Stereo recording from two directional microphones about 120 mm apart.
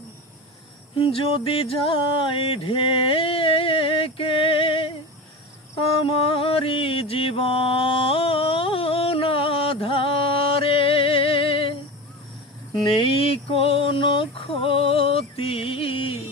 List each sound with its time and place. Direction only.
0.9 s music: 50° left (ahead or behind)
5.8 s mantra: 50° left (ahead or behind)
13.0 s a sound: 55° left (ahead or behind)